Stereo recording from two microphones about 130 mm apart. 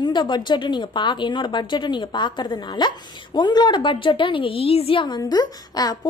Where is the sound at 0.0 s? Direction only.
35° left (ahead or behind).